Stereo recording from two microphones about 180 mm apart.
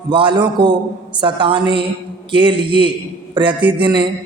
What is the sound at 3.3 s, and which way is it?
Speech, 25° right (ahead or behind).